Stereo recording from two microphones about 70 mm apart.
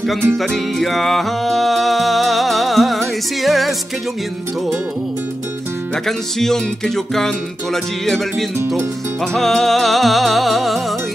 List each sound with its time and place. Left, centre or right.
0.4 s music: centre
6.0 s music: centre
8.5 s speech: right
9.2 s music: centre